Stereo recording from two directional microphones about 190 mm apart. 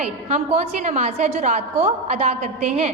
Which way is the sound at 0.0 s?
35° right (ahead or behind).